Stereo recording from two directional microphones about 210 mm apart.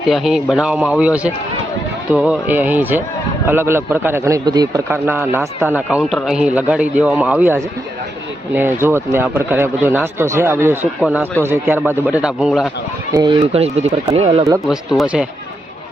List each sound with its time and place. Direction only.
0.1 s a man's voice: centre (ahead or behind)
13.1 s speech: 25° right (ahead or behind)
14.6 s speech: centre (ahead or behind)